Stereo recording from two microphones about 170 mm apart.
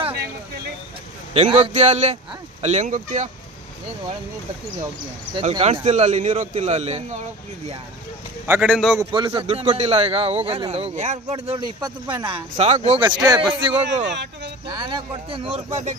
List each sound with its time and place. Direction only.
1.3 s a man's voice: 35° right (ahead or behind)
5.4 s a man's voice: 40° right (ahead or behind)
8.5 s a man's voice: 10° right (ahead or behind)
9.1 s a man's voice: 30° right (ahead or behind)
13.8 s a man's voice: 90° right
14.7 s a man's voice: 30° right (ahead or behind)